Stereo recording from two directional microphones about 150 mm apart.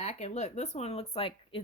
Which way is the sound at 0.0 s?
50° left (ahead or behind).